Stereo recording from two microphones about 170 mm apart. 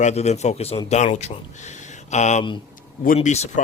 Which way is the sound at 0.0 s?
40° left (ahead or behind).